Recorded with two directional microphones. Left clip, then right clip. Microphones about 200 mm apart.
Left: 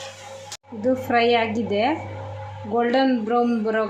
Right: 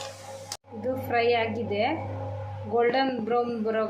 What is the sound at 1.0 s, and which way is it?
A man's voice, 50° left (ahead or behind).